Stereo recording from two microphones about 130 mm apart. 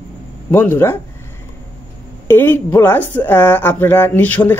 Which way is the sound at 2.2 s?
15° left (ahead or behind).